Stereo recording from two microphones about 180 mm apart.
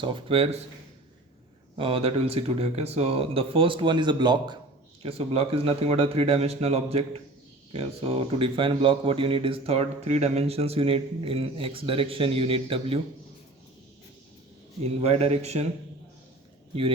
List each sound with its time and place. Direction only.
0.0 s speech: 30° right (ahead or behind)
1.7 s speech: 30° right (ahead or behind)
14.8 s speech: 35° right (ahead or behind)